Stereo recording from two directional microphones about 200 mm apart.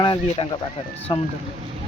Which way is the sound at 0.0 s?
25° left (ahead or behind).